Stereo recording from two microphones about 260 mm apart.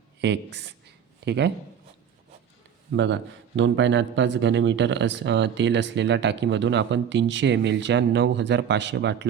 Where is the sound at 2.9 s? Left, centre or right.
Right.